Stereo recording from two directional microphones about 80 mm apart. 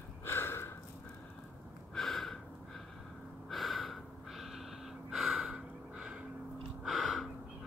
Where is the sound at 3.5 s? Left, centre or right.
Centre.